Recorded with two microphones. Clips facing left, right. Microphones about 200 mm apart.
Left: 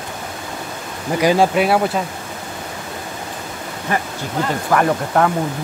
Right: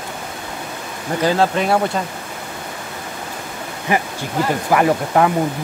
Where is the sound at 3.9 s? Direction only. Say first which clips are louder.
Right 2 dB; 15° right (ahead or behind).